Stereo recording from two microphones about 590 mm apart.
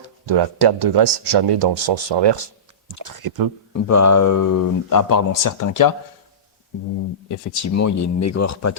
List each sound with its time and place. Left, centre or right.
0.3 s speech: right
3.0 s speech: right
3.7 s a man's voice: left
7.3 s a man's voice: left